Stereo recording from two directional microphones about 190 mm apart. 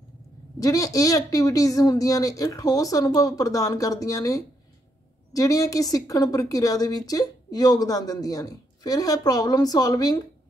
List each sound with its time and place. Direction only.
0.6 s speech: 15° left (ahead or behind)